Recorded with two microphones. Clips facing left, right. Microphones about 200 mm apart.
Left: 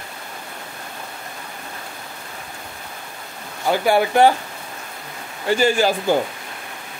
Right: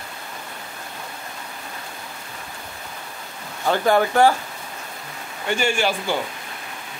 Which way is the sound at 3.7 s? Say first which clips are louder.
Left 1 dB; 10° left (ahead or behind).